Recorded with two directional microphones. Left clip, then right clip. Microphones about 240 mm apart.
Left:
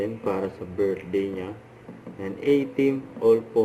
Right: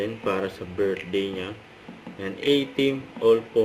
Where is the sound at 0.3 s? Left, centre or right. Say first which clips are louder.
Right 1 dB; right.